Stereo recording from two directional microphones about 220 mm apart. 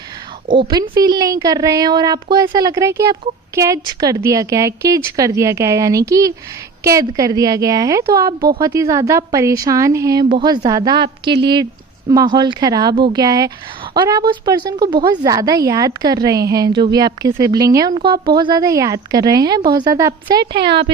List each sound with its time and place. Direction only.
0.5 s a woman's voice: 20° right (ahead or behind)